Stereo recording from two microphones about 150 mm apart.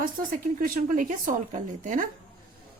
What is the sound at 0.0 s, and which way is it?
Speech, 65° right (ahead or behind).